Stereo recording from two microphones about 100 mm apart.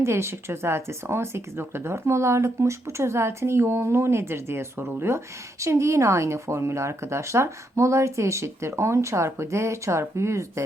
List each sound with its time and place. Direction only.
0.0 s speech: 25° right (ahead or behind)